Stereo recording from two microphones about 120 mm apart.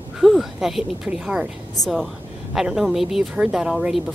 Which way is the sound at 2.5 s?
5° right (ahead or behind).